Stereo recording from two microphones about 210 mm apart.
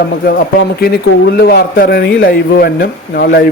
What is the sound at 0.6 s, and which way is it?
A man's voice, 50° left (ahead or behind).